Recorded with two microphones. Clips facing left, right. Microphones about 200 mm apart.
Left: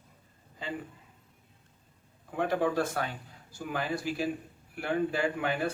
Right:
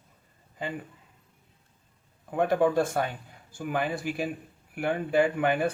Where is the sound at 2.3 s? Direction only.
55° right (ahead or behind).